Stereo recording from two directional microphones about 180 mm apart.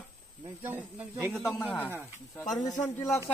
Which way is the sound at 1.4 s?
10° left (ahead or behind).